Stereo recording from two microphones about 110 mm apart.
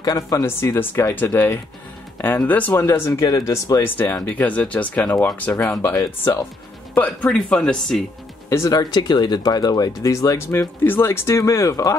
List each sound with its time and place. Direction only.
0.0 s speech: 30° left (ahead or behind)
3.8 s speech: 20° left (ahead or behind)
7.0 s speech: 10° left (ahead or behind)
8.5 s speech: 30° left (ahead or behind)